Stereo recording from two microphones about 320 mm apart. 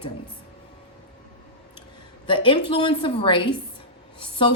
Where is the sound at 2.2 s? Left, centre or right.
Centre.